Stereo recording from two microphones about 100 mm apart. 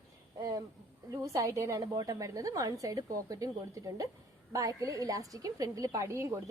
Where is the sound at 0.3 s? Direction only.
40° right (ahead or behind).